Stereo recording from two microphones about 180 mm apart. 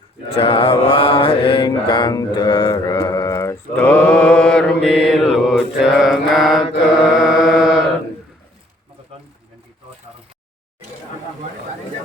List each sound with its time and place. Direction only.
0.3 s mantra: 30° left (ahead or behind); by 6.7 s centre (ahead or behind)
7.2 s chant: 5° right (ahead or behind)